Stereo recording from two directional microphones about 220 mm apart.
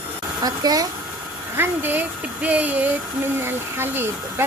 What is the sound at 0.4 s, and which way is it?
Speech, 15° right (ahead or behind).